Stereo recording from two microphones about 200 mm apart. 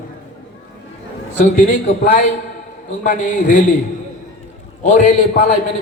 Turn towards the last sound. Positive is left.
turn(degrees=40)  # may be behind; listen again after turning